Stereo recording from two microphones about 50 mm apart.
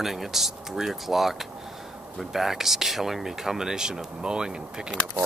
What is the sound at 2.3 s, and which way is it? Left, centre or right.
Speech, centre.